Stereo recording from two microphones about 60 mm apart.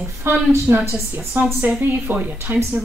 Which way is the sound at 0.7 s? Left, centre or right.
Right.